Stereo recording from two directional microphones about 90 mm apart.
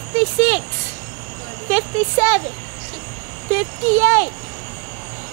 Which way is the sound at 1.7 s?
15° right (ahead or behind).